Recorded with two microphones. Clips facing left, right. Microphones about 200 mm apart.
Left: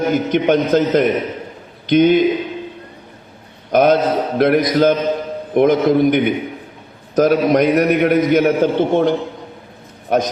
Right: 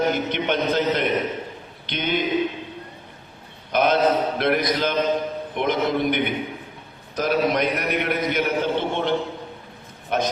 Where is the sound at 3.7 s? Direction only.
50° left (ahead or behind).